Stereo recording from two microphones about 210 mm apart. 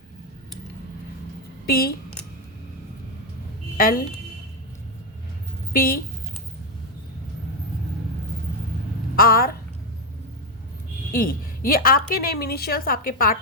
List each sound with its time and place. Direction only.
1.6 s a woman's voice: 45° left (ahead or behind)
3.8 s a woman's voice: 45° left (ahead or behind)
5.7 s a woman's voice: 45° left (ahead or behind)
9.1 s a sound: 45° left (ahead or behind)
11.2 s a woman's voice: 45° left (ahead or behind)